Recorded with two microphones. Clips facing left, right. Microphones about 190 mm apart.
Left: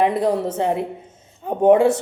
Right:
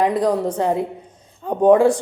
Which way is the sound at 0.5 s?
25° left (ahead or behind).